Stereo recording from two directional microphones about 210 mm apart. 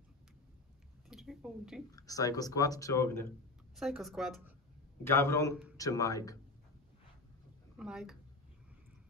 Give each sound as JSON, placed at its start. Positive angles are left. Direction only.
{"t": 1.0, "sound": "a sound", "side_deg": 0}
{"t": 1.9, "sound": "speech", "side_deg": 15}
{"t": 3.7, "sound": "speech", "side_deg": 0}
{"t": 5.0, "sound": "speech", "side_deg": 10}
{"t": 7.7, "sound": "speech", "side_deg": -5}